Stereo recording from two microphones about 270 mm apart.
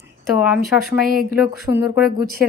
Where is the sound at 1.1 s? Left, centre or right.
Right.